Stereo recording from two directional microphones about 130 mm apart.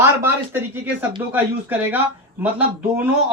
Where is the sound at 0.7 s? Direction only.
15° right (ahead or behind).